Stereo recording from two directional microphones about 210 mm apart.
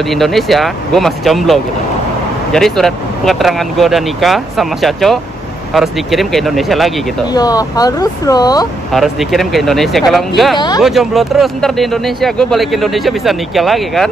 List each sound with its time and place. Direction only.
0.1 s speech: centre (ahead or behind)
7.3 s speech: 15° left (ahead or behind)
8.9 s speech: centre (ahead or behind)